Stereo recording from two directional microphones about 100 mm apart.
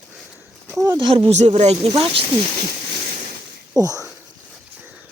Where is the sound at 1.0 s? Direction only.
55° right (ahead or behind).